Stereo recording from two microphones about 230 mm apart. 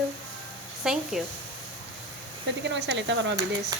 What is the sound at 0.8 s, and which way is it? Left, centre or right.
Speech, centre.